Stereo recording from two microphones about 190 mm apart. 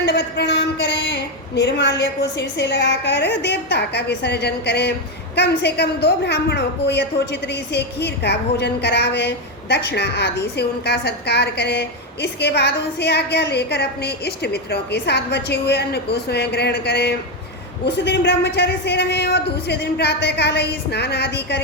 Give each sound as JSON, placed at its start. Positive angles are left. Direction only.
{"t": 0.0, "sound": "a woman's voice", "side_deg": 65}